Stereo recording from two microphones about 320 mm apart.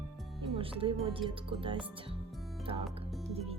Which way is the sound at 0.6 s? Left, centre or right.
Centre.